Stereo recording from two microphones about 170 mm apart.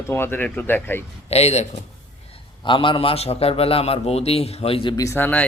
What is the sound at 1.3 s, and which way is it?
Speech, 40° left (ahead or behind).